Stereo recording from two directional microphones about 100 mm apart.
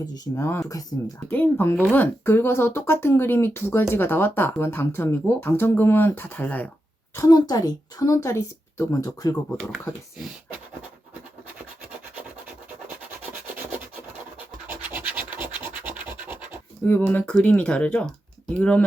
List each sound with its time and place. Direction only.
0.1 s speech: 30° left (ahead or behind)
7.2 s a woman's voice: 40° left (ahead or behind)
14.3 s scratch: 20° right (ahead or behind)
16.8 s speech: 15° left (ahead or behind)